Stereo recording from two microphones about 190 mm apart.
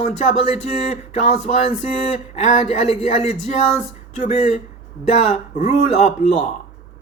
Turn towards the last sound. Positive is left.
turn(degrees=35)  # may be behind; listen again after turning